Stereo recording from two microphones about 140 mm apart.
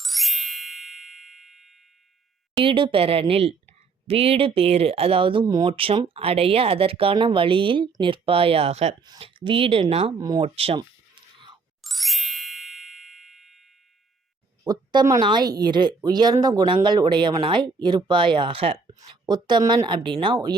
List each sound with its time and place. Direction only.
0.0 s ding: centre (ahead or behind)
2.6 s speech: 40° right (ahead or behind)
9.0 s speech: 35° right (ahead or behind)
10.2 s speech: 25° right (ahead or behind)
10.4 s speech: 40° right (ahead or behind)
10.8 s a sound: 35° right (ahead or behind)
11.8 s ding: centre (ahead or behind)
14.6 s speech: 25° right (ahead or behind)